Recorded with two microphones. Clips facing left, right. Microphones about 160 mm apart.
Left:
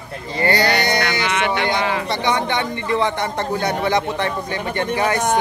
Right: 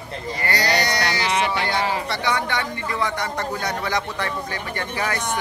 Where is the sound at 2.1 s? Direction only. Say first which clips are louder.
Left 4 dB; 20° left (ahead or behind).